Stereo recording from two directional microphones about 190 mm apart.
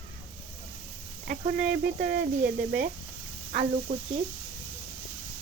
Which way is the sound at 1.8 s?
45° right (ahead or behind).